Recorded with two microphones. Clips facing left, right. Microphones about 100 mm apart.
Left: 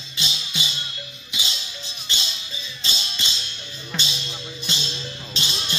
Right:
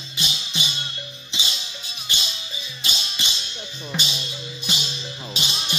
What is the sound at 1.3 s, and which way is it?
Music, 25° right (ahead or behind).